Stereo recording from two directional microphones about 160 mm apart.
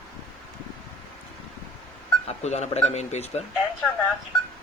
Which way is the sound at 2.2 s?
45° left (ahead or behind).